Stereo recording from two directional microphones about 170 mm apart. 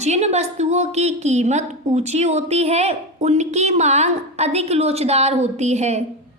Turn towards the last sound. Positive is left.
turn(degrees=-40)  # may be behind; listen again after turning